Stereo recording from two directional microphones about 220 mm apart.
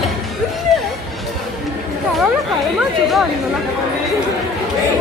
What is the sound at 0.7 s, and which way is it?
Music, centre (ahead or behind).